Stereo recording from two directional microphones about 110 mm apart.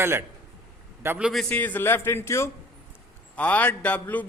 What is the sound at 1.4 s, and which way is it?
A woman's voice, 15° left (ahead or behind).